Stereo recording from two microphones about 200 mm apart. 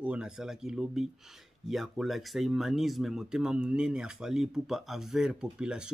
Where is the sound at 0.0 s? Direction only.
5° right (ahead or behind).